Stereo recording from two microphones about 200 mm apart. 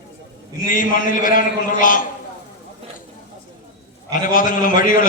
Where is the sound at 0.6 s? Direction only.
40° left (ahead or behind).